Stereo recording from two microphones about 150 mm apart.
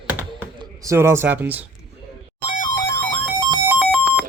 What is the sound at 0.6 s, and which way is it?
A man's voice, 20° right (ahead or behind).